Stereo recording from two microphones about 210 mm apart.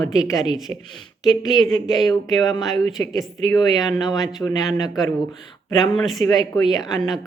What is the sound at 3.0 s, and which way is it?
A woman's voice, 15° left (ahead or behind).